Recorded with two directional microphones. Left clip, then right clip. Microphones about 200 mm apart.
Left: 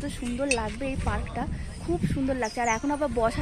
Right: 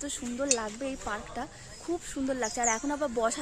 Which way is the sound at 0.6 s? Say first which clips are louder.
Left 4 dB; 5° right (ahead or behind).